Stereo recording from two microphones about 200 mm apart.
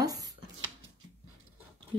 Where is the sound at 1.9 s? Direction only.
25° right (ahead or behind).